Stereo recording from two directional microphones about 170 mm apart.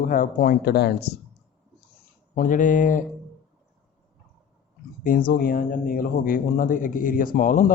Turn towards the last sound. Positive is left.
turn(degrees=55)  # may be behind; listen again after turning